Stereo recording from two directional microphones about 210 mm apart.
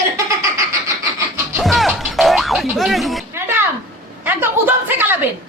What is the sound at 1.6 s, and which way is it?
Music, centre (ahead or behind).